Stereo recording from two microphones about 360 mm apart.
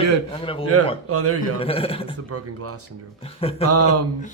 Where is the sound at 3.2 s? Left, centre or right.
Centre.